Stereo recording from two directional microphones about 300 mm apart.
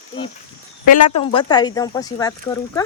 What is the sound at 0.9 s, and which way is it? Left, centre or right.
Speech, centre.